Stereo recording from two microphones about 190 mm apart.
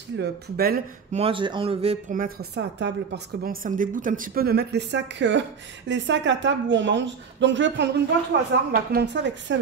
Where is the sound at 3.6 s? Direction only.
45° right (ahead or behind); by 7.9 s 70° right (ahead or behind).